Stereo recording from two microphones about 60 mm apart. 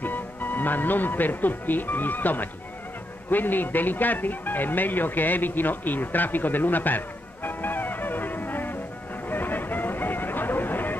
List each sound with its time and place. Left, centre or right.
0.0 s speech: left
7.4 s music: left